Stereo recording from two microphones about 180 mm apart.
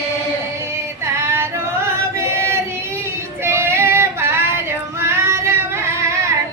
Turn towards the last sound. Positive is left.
turn(degrees=-15)  # may be behind; listen again after turning